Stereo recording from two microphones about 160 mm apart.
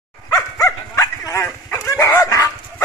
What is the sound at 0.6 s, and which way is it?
Dog, 20° left (ahead or behind).